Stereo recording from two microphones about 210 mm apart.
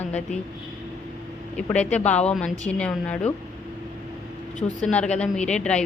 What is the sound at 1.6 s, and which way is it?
A woman's voice, 5° left (ahead or behind).